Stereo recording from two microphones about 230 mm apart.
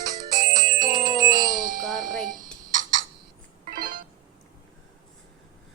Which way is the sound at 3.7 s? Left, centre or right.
Right.